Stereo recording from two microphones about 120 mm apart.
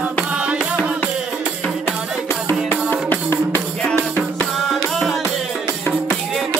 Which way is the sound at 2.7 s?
15° left (ahead or behind).